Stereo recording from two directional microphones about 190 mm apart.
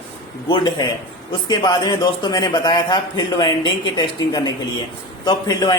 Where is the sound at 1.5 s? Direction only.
20° left (ahead or behind).